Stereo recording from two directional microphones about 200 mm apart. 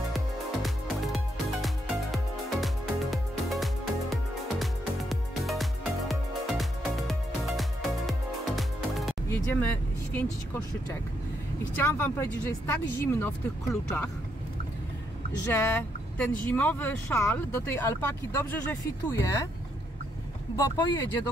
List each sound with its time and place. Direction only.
0.6 s music: centre (ahead or behind)
9.3 s vehicle: 10° left (ahead or behind)
11.7 s speech: 10° left (ahead or behind)
15.4 s speech: 10° left (ahead or behind)
20.5 s speech: 20° left (ahead or behind)